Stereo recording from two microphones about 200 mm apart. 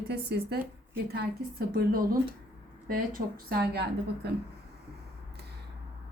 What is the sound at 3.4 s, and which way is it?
Speech, 55° right (ahead or behind).